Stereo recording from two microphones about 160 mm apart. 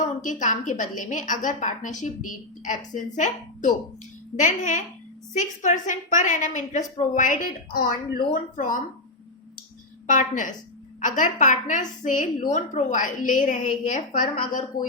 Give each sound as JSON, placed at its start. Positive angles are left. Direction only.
{"t": 0.0, "sound": "a woman's voice", "side_deg": 50}
{"t": 10.1, "sound": "a woman's voice", "side_deg": 55}